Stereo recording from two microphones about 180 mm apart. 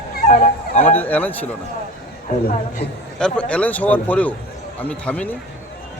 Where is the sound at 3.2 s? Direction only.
5° left (ahead or behind).